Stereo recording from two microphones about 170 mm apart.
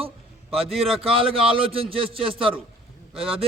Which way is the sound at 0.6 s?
35° right (ahead or behind).